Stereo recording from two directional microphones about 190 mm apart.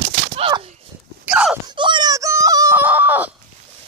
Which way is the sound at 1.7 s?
25° right (ahead or behind).